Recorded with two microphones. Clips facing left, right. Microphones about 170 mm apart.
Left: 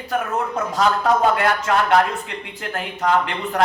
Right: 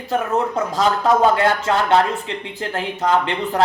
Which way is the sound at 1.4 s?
30° right (ahead or behind).